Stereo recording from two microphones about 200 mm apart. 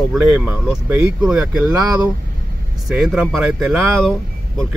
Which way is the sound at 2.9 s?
5° right (ahead or behind).